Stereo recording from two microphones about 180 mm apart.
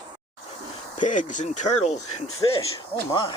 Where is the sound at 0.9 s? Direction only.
45° left (ahead or behind).